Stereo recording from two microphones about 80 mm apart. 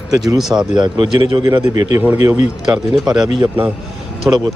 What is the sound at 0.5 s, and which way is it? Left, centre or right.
Speech, right.